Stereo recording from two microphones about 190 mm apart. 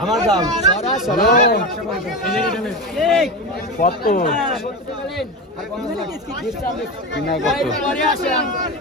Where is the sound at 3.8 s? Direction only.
50° left (ahead or behind).